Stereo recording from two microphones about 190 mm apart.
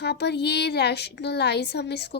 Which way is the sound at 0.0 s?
60° left (ahead or behind).